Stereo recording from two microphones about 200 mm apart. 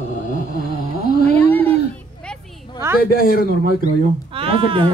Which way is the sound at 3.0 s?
45° left (ahead or behind).